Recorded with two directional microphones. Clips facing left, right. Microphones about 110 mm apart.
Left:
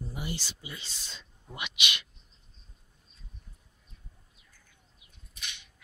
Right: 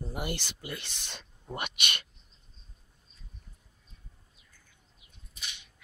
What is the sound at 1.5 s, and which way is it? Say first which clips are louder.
Speech: right 1 dB; 50° right (ahead or behind).